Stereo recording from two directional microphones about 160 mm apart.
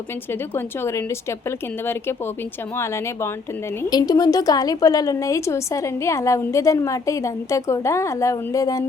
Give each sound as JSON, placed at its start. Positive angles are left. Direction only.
{"t": 0.3, "sound": "a woman's voice", "side_deg": 15}